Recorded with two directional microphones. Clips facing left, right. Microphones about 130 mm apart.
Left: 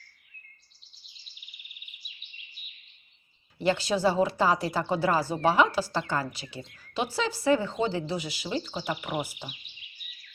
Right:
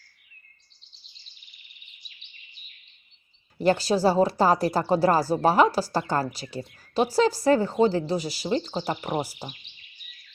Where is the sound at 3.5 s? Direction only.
40° right (ahead or behind).